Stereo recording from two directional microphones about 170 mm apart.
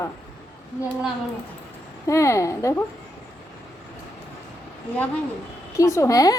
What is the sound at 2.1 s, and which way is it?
Speech, 20° left (ahead or behind).